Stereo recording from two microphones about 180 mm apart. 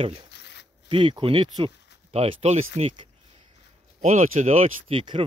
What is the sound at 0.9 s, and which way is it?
Speech, 30° right (ahead or behind).